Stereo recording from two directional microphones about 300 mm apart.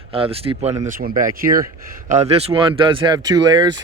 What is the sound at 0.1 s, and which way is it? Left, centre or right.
Speech, centre.